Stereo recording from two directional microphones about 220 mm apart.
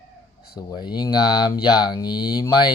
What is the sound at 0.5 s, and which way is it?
Speech, 20° left (ahead or behind).